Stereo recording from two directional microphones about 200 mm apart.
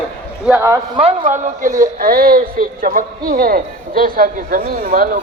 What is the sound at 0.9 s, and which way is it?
Speech, 30° right (ahead or behind).